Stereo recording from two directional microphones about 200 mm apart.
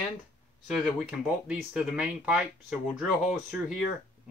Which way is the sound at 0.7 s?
5° right (ahead or behind).